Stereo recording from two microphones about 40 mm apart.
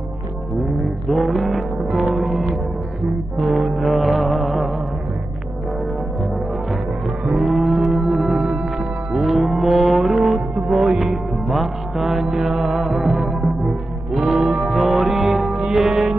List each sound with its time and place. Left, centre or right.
1.4 s music: centre
7.2 s music: centre